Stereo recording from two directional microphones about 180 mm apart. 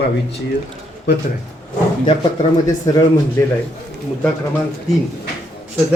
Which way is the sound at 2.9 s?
20° left (ahead or behind).